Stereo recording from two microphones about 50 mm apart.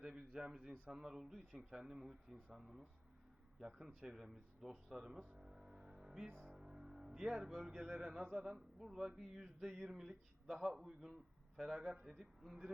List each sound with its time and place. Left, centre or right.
0.0 s a sound: centre
0.3 s a man's voice: centre
5.4 s music: centre
7.5 s a man's voice: centre
7.9 s speech: centre
10.0 s a man's voice: centre